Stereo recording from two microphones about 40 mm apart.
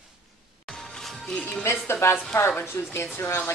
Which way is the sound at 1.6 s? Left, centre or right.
Left.